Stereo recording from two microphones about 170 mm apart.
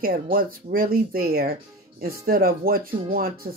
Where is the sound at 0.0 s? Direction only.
55° right (ahead or behind).